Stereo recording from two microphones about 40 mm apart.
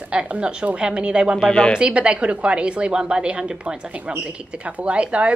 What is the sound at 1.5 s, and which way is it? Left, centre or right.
Speech, left.